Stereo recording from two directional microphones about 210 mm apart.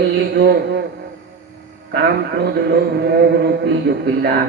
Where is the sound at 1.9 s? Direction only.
50° right (ahead or behind).